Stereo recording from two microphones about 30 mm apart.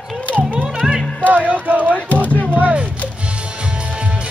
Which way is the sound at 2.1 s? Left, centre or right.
Left.